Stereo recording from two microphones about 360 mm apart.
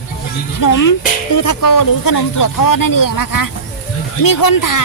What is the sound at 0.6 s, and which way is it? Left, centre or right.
Speech, left.